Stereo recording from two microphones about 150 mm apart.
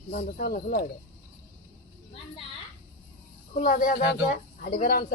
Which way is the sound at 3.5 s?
60° left (ahead or behind).